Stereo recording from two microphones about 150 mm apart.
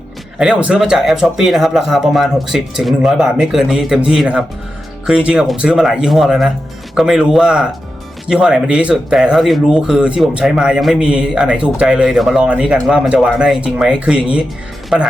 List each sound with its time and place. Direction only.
0.3 s speech: 5° right (ahead or behind)